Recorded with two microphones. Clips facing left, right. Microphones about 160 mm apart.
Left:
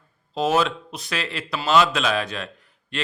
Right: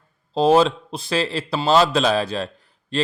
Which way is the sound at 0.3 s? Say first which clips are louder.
Right 6 dB; 30° right (ahead or behind).